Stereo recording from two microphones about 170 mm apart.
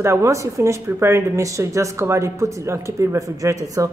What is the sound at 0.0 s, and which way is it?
Speech, 15° right (ahead or behind).